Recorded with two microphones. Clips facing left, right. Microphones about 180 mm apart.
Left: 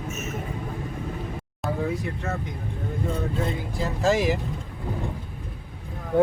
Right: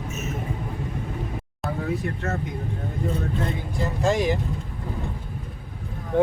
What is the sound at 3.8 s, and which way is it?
Speech, centre (ahead or behind).